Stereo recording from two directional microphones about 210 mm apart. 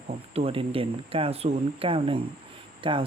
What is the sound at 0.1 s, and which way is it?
Speech, 30° right (ahead or behind).